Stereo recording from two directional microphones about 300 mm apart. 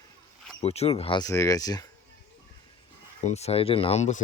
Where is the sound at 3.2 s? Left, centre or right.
Left.